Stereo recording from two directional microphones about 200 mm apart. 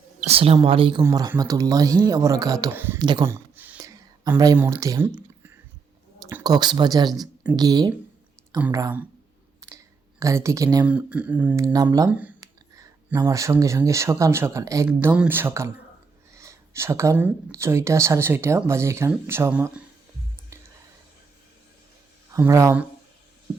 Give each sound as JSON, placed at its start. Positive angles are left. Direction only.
{"t": 0.2, "sound": "speech", "side_deg": -30}
{"t": 1.0, "sound": "speech", "side_deg": -15}
{"t": 3.0, "sound": "a sound", "side_deg": -20}
{"t": 4.5, "sound": "speech", "side_deg": -15}
{"t": 9.6, "sound": "clicking", "side_deg": -15}
{"t": 10.8, "sound": "speech", "side_deg": -5}
{"t": 14.8, "sound": "speech", "side_deg": -5}
{"t": 22.3, "sound": "speech", "side_deg": -15}